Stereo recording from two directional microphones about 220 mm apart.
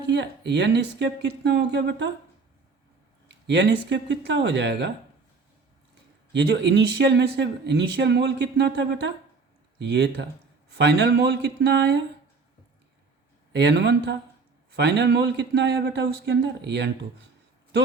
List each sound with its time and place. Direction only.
0.1 s speech: 50° right (ahead or behind)
3.2 s speech: 50° right (ahead or behind)
6.3 s speech: 50° right (ahead or behind)
13.5 s speech: 50° right (ahead or behind)